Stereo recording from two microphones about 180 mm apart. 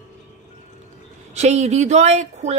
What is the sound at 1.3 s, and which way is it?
Speech, 40° right (ahead or behind).